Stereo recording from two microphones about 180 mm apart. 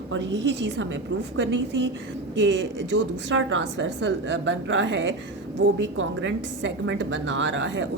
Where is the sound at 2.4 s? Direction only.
90° right.